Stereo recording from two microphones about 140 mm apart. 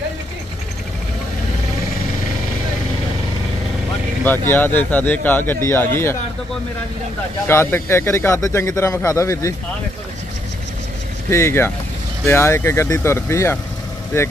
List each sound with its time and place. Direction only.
4.2 s speech: 15° left (ahead or behind)
7.4 s a man's voice: 20° left (ahead or behind)
11.2 s a man's voice: 20° left (ahead or behind)